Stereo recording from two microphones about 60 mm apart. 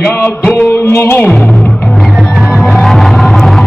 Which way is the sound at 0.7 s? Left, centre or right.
Left.